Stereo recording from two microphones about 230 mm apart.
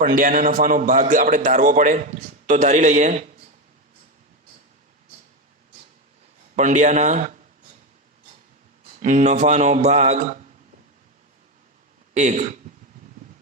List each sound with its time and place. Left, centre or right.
0.0 s a man's voice: right
6.6 s a man's voice: right
9.0 s a man's voice: right
12.1 s a man's voice: right